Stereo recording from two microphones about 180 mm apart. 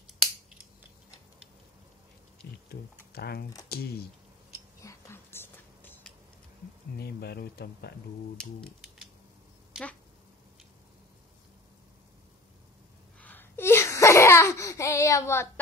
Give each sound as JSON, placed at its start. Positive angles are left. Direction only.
{"t": 2.7, "sound": "speech", "side_deg": 60}
{"t": 4.8, "sound": "whispering", "side_deg": 15}
{"t": 7.0, "sound": "speech", "side_deg": 65}
{"t": 8.4, "sound": "speech", "side_deg": 0}
{"t": 13.2, "sound": "laughter", "side_deg": 10}